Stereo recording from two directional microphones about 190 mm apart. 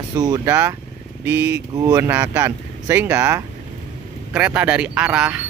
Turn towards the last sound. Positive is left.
turn(degrees=-5)  # may be behind; listen again after turning